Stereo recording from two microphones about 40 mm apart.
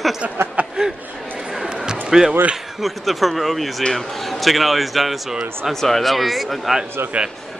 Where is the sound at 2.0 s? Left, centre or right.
Centre.